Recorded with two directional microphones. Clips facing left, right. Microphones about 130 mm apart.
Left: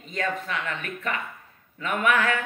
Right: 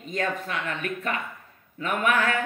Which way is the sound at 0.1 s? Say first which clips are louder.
Even; 40° right (ahead or behind).